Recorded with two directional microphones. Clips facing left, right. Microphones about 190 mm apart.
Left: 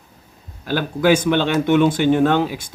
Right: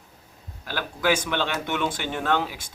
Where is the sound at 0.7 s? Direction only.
25° left (ahead or behind).